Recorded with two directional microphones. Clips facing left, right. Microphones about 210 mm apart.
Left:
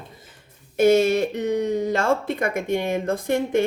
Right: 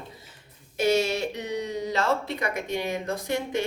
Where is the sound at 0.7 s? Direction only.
50° left (ahead or behind).